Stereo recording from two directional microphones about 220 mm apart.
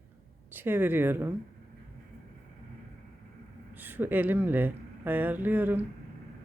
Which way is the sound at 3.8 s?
10° right (ahead or behind).